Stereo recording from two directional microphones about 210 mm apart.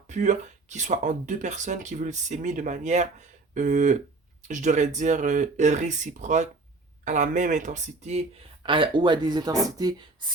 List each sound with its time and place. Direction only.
0.1 s speech: 35° right (ahead or behind); by 10.2 s 20° right (ahead or behind)